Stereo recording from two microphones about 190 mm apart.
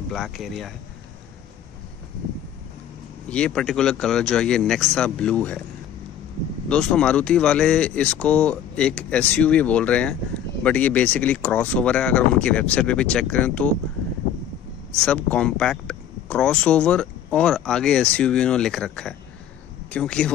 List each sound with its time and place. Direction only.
0.1 s speech: centre (ahead or behind)
3.3 s speech: 5° left (ahead or behind)
6.7 s speech: 5° left (ahead or behind)
15.0 s speech: 5° left (ahead or behind)